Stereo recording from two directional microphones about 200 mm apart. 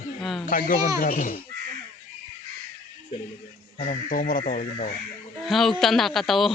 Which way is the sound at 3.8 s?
40° left (ahead or behind).